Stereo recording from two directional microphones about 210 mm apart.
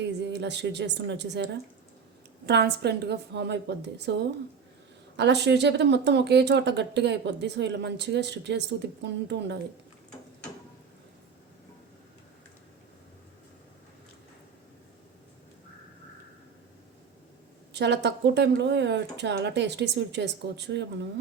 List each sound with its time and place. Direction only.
0.0 s speech: 55° right (ahead or behind)
2.5 s a woman's voice: 50° right (ahead or behind)
5.1 s speech: 55° right (ahead or behind)
17.7 s speech: 55° right (ahead or behind)